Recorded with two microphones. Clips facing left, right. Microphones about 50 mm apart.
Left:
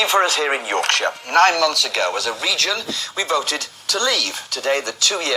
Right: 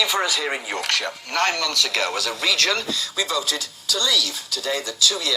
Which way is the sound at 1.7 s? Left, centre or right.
Left.